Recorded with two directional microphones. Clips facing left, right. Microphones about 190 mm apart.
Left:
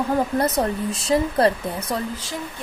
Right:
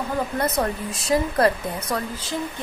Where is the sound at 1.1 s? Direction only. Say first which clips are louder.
Left 1 dB; 30° left (ahead or behind).